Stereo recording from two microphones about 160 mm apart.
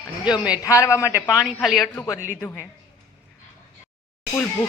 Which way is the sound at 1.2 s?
5° right (ahead or behind).